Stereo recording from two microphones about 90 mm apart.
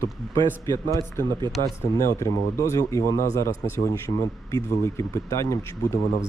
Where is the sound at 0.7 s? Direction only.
45° right (ahead or behind).